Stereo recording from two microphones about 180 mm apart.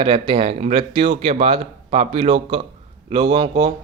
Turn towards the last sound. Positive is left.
turn(degrees=-25)  # may be behind; listen again after turning